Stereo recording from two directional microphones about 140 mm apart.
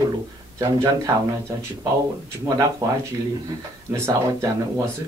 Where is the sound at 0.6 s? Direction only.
20° right (ahead or behind).